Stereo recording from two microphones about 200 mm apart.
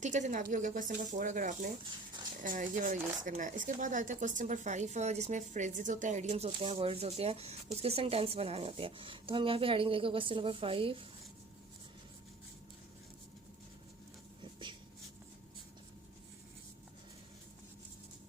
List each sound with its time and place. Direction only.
0.0 s speech: 35° right (ahead or behind)